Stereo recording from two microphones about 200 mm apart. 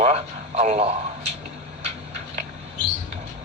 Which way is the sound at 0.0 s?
30° right (ahead or behind).